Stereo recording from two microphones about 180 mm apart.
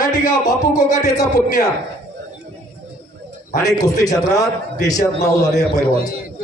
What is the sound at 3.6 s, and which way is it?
A man's voice, 20° left (ahead or behind).